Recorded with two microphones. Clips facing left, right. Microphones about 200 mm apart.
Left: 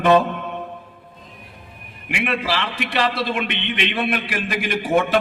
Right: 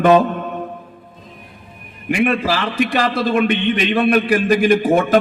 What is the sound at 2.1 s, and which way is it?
A man's voice, 45° right (ahead or behind).